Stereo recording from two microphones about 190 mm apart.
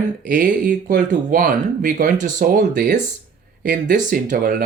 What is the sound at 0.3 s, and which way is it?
Speech, 45° right (ahead or behind).